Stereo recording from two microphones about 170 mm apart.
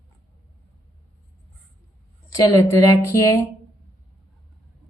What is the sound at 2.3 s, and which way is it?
Speech, 20° left (ahead or behind).